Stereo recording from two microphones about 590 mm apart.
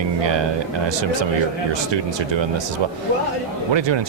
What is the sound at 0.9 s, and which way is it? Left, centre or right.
Speech, right.